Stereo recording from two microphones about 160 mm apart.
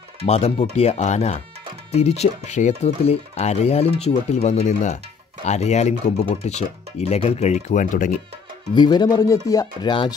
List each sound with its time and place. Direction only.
0.2 s speech: 40° left (ahead or behind)
8.7 s speech: 25° left (ahead or behind)